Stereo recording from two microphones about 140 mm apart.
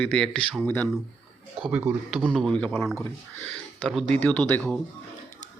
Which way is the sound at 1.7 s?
10° right (ahead or behind).